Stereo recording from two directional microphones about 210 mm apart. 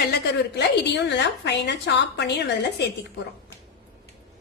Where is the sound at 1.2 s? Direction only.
55° left (ahead or behind).